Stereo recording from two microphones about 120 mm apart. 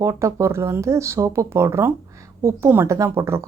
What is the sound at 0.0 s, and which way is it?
Speech, 25° right (ahead or behind).